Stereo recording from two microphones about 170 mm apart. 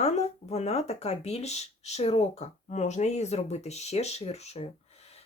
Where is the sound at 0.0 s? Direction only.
40° left (ahead or behind).